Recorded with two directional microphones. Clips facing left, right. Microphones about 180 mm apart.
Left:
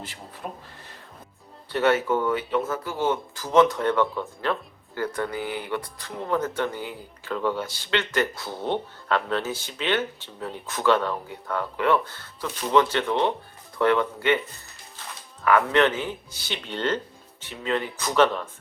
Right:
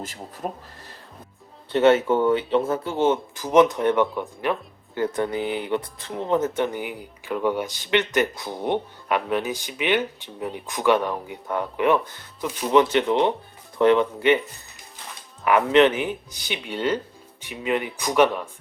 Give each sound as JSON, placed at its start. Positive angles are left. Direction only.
{"t": 0.0, "sound": "speech", "side_deg": -45}
{"t": 1.7, "sound": "speech", "side_deg": -25}
{"t": 15.4, "sound": "speech", "side_deg": -20}